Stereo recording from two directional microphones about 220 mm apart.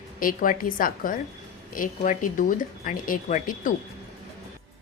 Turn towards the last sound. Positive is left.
turn(degrees=35)  # may be behind; listen again after turning